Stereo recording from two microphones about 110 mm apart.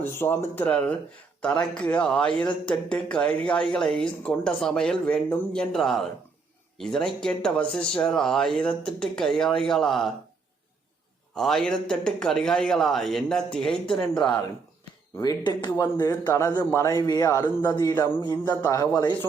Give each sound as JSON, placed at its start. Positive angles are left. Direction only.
{"t": 0.0, "sound": "speech", "side_deg": 20}
{"t": 11.3, "sound": "speech", "side_deg": 5}
{"t": 15.2, "sound": "speech", "side_deg": 40}
{"t": 15.7, "sound": "speech", "side_deg": 25}
{"t": 18.4, "sound": "speech", "side_deg": 20}
{"t": 18.8, "sound": "speech", "side_deg": 35}